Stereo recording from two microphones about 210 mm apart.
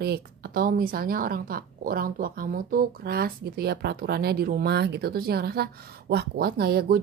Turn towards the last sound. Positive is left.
turn(degrees=-45)  # may be behind; listen again after turning